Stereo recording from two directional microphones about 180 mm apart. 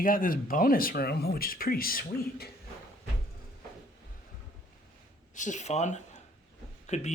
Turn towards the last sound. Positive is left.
turn(degrees=40)  # may be behind; listen again after turning